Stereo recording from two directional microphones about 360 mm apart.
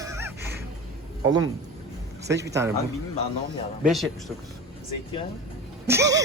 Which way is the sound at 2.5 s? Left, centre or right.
Centre.